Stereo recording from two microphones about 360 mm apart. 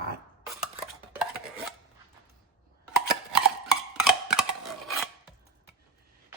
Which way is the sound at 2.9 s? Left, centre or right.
Centre.